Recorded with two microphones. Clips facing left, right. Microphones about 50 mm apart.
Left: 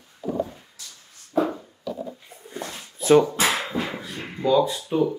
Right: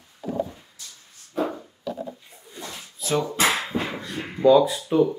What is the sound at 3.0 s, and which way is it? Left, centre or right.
Speech, left.